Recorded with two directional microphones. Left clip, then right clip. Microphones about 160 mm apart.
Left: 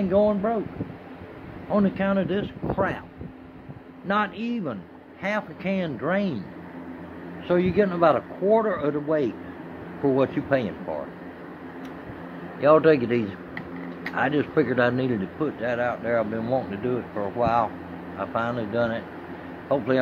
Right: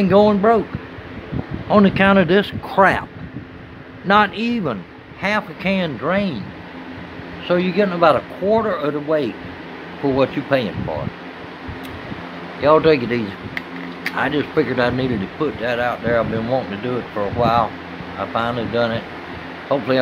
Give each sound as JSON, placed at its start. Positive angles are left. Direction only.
{"t": 0.1, "sound": "speech", "side_deg": -45}
{"t": 1.7, "sound": "speech", "side_deg": -35}
{"t": 4.1, "sound": "speech", "side_deg": -35}
{"t": 5.2, "sound": "speech", "side_deg": -15}
{"t": 6.0, "sound": "speech", "side_deg": 0}
{"t": 7.4, "sound": "speech", "side_deg": 0}
{"t": 12.5, "sound": "speech", "side_deg": 0}